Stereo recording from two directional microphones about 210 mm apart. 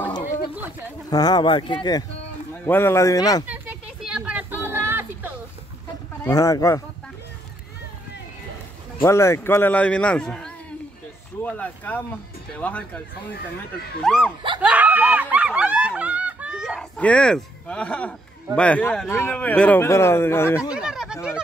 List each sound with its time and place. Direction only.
1.1 s speech: 20° left (ahead or behind)
3.4 s a sound: 10° right (ahead or behind)
6.2 s speech: 15° left (ahead or behind)
9.0 s speech: 10° left (ahead or behind)
14.0 s speech: centre (ahead or behind)
14.6 s snicker: 5° right (ahead or behind)
18.6 s speech: 5° left (ahead or behind)
20.7 s a sound: 5° right (ahead or behind)